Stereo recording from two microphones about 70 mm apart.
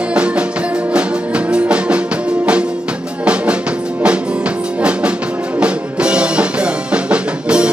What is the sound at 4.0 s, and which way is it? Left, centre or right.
Music, centre.